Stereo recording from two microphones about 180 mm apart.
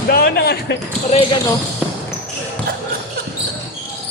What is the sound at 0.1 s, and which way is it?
Speech, 60° left (ahead or behind).